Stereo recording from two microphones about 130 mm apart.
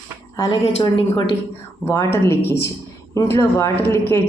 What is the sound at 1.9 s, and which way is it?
A woman's voice, 20° left (ahead or behind).